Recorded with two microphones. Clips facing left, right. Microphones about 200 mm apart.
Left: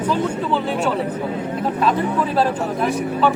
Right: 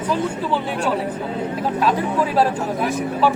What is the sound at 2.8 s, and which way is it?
Speech, 5° right (ahead or behind).